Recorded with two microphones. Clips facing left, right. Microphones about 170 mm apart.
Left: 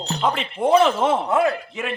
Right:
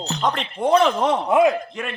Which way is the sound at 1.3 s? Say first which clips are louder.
Right 8 dB; 15° right (ahead or behind).